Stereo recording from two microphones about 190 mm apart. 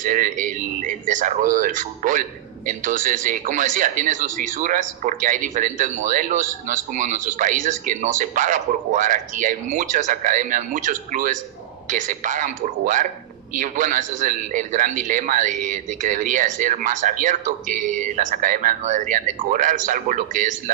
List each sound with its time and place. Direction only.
0.0 s a man's voice: 45° right (ahead or behind)